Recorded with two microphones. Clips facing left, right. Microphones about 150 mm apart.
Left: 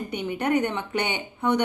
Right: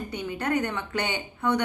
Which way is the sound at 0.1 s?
20° left (ahead or behind).